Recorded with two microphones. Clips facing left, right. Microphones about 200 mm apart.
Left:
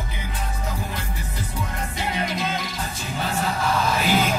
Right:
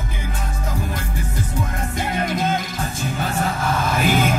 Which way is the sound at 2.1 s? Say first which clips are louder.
Right 6 dB; 50° right (ahead or behind).